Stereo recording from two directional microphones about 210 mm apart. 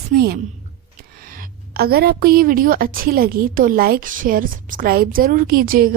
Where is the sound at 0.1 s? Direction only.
50° right (ahead or behind).